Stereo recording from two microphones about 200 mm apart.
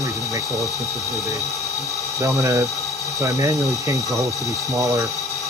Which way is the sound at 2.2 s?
15° right (ahead or behind).